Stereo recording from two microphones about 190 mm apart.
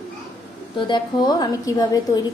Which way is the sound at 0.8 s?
20° left (ahead or behind).